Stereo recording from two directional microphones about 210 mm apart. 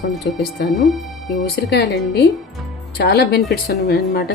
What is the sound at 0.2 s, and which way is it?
A woman's voice, 50° left (ahead or behind).